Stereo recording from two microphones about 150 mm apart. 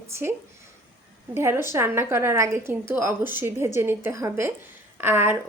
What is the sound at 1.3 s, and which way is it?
A woman's voice, 15° right (ahead or behind).